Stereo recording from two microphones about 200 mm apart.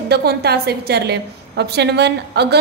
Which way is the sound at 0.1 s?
55° right (ahead or behind).